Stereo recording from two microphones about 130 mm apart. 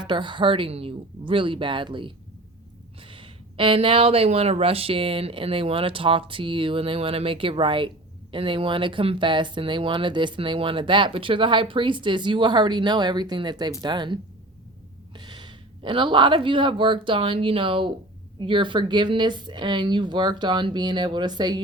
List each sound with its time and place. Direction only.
0.0 s speech: 35° right (ahead or behind)